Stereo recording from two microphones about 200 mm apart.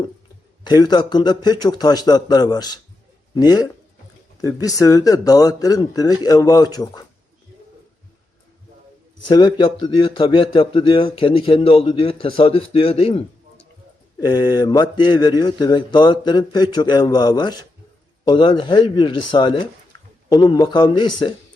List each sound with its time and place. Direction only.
0.6 s speech: 20° left (ahead or behind)
9.2 s speech: 20° left (ahead or behind)